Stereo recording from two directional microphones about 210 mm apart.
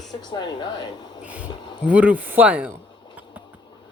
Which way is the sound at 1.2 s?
5° right (ahead or behind).